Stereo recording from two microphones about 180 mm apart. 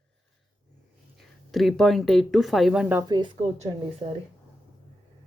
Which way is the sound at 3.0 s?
25° right (ahead or behind).